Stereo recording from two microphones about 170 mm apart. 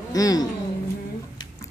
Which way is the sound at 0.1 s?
20° left (ahead or behind).